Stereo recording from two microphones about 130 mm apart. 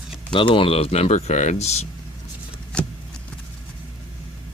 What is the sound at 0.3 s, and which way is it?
Speech, 40° left (ahead or behind).